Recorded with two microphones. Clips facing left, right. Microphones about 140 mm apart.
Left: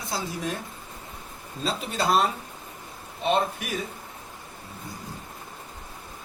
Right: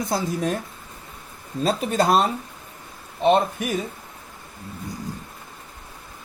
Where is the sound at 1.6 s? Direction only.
50° right (ahead or behind).